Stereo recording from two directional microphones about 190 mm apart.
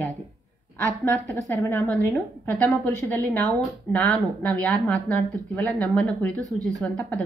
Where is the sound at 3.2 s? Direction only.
20° right (ahead or behind).